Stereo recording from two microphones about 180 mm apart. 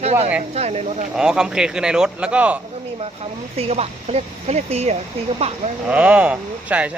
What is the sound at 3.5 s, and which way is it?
Speech, 35° right (ahead or behind).